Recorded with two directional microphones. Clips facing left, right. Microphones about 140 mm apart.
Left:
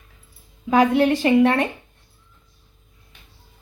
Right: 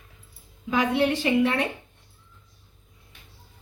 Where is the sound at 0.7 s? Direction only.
45° left (ahead or behind).